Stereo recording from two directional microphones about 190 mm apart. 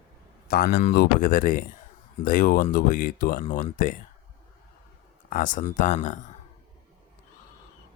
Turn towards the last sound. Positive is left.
turn(degrees=40)  # may be behind; listen again after turning